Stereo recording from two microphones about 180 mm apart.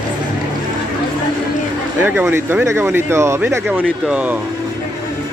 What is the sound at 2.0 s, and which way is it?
Speech, 10° right (ahead or behind).